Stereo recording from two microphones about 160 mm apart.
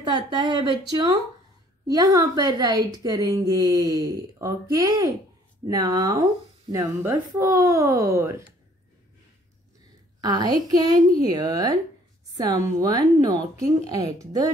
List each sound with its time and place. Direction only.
0.0 s a woman's voice: 30° right (ahead or behind)
10.2 s a woman's voice: 25° right (ahead or behind)